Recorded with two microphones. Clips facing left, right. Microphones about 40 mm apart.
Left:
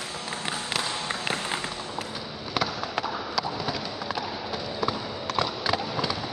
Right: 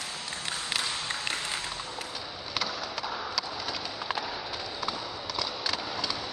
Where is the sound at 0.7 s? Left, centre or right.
Centre.